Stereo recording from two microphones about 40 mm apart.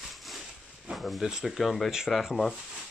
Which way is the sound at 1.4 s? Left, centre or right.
Centre.